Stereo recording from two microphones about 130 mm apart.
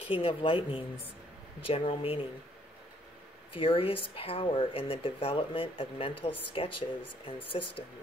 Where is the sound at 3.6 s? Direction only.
45° left (ahead or behind).